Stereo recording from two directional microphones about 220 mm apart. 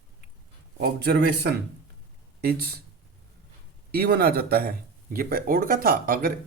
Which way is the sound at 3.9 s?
45° right (ahead or behind).